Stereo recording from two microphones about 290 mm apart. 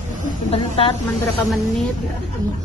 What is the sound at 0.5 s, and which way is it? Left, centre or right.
Speech, centre.